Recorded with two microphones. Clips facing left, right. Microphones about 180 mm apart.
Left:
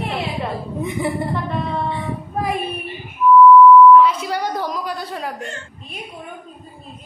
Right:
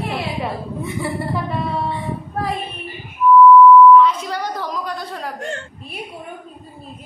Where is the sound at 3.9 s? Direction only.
5° left (ahead or behind).